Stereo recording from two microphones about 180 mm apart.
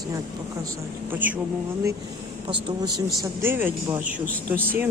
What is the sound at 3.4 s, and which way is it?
Speech, 10° right (ahead or behind).